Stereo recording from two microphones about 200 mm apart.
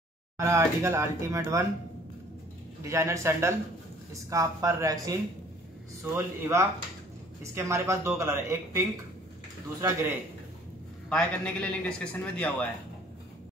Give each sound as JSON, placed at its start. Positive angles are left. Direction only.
{"t": 0.4, "sound": "speech", "side_deg": -15}
{"t": 2.8, "sound": "speech", "side_deg": -15}
{"t": 6.1, "sound": "speech", "side_deg": -15}
{"t": 11.1, "sound": "a man's voice", "side_deg": 5}